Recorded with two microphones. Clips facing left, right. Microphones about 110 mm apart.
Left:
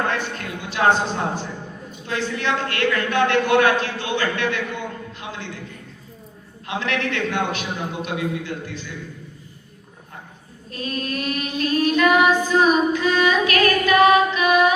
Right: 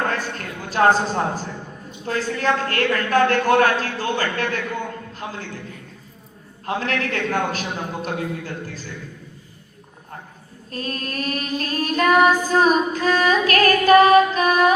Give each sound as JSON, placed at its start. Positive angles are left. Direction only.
{"t": 0.1, "sound": "child singing", "side_deg": -40}
{"t": 5.1, "sound": "a man's voice", "side_deg": -40}
{"t": 6.7, "sound": "child singing", "side_deg": -40}
{"t": 10.7, "sound": "child singing", "side_deg": -40}